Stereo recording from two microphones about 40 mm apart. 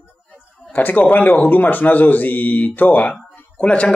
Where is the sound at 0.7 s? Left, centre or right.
Left.